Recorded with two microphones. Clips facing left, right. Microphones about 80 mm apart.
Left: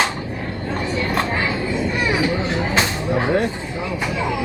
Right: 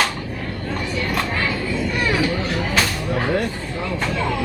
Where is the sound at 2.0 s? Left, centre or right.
Centre.